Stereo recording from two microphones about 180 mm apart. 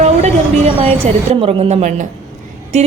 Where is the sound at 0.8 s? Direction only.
35° right (ahead or behind).